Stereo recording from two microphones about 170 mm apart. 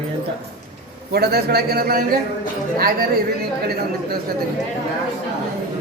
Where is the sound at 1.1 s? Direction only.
70° right (ahead or behind).